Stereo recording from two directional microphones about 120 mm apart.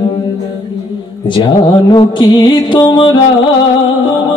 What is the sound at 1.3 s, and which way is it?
Music, 45° left (ahead or behind).